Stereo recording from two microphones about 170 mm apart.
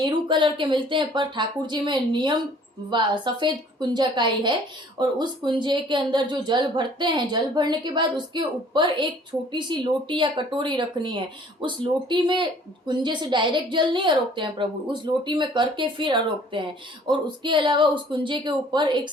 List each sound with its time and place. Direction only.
0.0 s speech: 25° right (ahead or behind)